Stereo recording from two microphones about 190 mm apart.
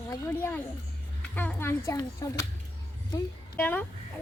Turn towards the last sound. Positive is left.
turn(degrees=10)  # may be behind; listen again after turning